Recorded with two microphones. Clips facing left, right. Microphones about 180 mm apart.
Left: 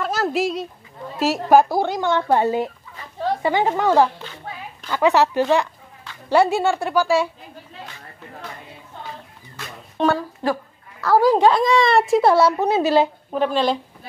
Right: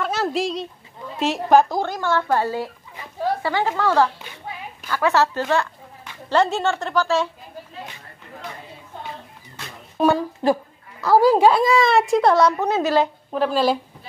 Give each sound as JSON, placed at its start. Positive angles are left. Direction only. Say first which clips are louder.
{"t": 0.0, "sound": "a sound", "louder": "left 1 dB", "side_deg": 0}
{"t": 1.2, "sound": "a woman's voice", "louder": "left 1 dB", "side_deg": 5}
{"t": 3.0, "sound": "a sound", "louder": "even", "side_deg": -10}
{"t": 3.4, "sound": "a woman's voice", "louder": "left 5 dB", "side_deg": 20}
{"t": 9.9, "sound": "a woman's voice", "louder": "right 2 dB", "side_deg": -10}
{"t": 13.3, "sound": "a woman's voice", "louder": "right 3 dB", "side_deg": 0}